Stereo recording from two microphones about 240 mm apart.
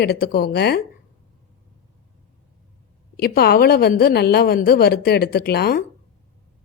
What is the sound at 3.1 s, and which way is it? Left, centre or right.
Speech, left.